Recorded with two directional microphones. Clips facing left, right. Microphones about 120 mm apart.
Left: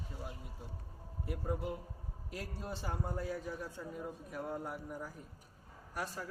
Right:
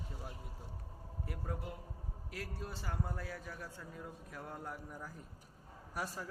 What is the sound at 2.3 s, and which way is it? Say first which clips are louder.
A man's voice: left 2 dB; 20° left (ahead or behind).